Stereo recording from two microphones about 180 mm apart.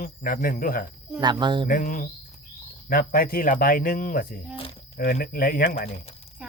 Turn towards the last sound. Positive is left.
turn(degrees=55)  # may be behind; listen again after turning